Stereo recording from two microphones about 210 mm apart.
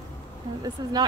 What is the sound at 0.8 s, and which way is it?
Speech, 20° right (ahead or behind).